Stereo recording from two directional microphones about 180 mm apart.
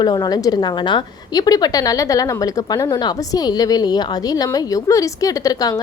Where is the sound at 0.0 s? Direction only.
25° left (ahead or behind).